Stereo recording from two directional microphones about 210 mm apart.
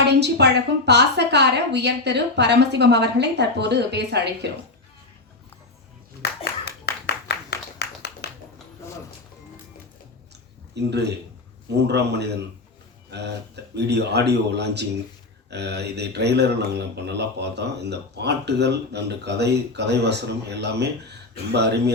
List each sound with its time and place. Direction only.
0.0 s a woman's voice: 55° right (ahead or behind)
6.4 s clapping: 50° left (ahead or behind)
10.8 s speech: 55° right (ahead or behind)
13.7 s speech: 55° right (ahead or behind)